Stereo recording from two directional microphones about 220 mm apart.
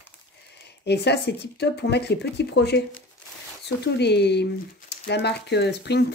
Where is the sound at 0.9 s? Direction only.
50° left (ahead or behind).